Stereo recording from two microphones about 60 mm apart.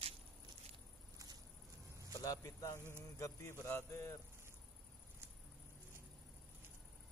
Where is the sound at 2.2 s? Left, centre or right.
Left.